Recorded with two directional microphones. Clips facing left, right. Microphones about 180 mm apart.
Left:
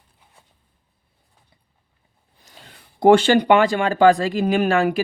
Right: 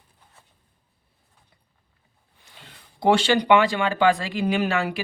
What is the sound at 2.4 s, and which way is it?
Speech, 45° left (ahead or behind).